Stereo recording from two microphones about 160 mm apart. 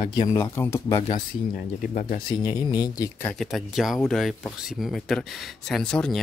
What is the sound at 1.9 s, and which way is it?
Speech, 60° left (ahead or behind).